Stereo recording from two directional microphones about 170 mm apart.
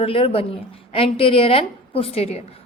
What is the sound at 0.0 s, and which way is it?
A woman's voice, 30° left (ahead or behind).